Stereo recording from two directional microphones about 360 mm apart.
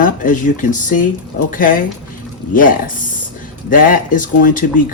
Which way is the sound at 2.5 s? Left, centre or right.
Left.